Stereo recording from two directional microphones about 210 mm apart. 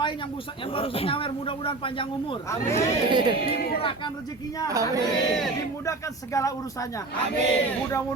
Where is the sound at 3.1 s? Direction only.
20° right (ahead or behind).